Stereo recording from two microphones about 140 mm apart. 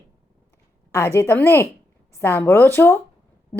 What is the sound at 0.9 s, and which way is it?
A woman's voice, 20° left (ahead or behind).